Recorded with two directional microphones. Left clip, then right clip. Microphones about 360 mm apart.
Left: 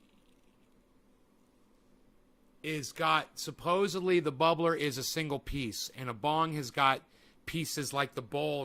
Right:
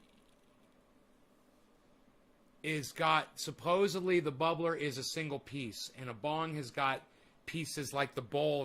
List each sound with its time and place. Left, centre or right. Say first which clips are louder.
2.6 s speech: left 1 dB; centre